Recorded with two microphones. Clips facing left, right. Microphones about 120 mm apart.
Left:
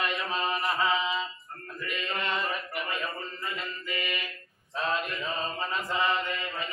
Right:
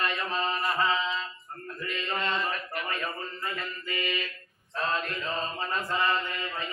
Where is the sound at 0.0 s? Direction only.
15° left (ahead or behind).